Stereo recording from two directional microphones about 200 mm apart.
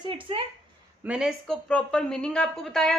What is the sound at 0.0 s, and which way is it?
Speech, 25° right (ahead or behind).